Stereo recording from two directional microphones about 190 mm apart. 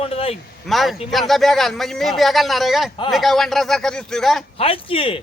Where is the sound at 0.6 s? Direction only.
Centre (ahead or behind).